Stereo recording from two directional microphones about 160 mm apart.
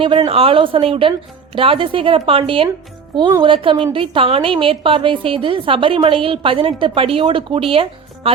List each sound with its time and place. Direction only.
0.0 s a woman's voice: 35° right (ahead or behind)